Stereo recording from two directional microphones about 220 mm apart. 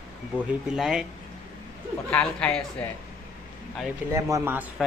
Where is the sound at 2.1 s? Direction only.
5° left (ahead or behind).